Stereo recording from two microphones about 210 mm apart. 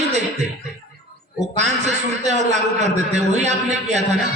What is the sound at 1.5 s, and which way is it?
A man's voice, 35° right (ahead or behind).